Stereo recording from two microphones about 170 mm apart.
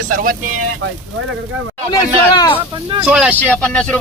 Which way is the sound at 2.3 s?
25° left (ahead or behind).